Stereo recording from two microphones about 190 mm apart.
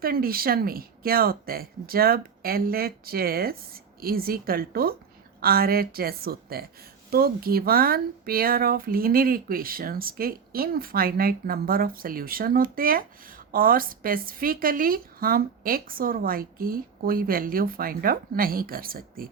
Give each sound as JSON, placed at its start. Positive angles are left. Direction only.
{"t": 0.0, "sound": "speech", "side_deg": -50}